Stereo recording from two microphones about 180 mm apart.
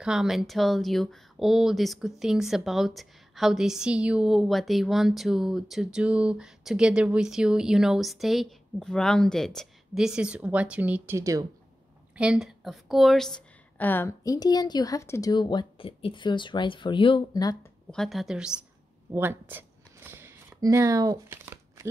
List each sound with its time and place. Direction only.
0.0 s a woman's voice: 5° right (ahead or behind)
12.2 s speech: 5° right (ahead or behind); by 17.6 s 20° left (ahead or behind)
17.9 s speech: centre (ahead or behind)
19.1 s a sound: 10° right (ahead or behind)